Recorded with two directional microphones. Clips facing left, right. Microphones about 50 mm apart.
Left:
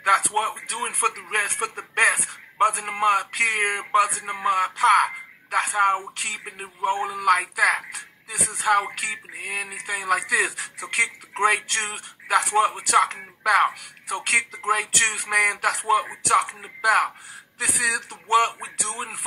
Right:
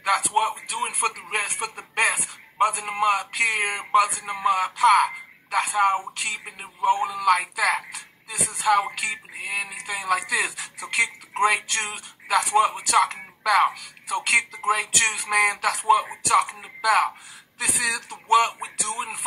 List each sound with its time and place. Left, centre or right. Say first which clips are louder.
0.0 s speech: left 1 dB; left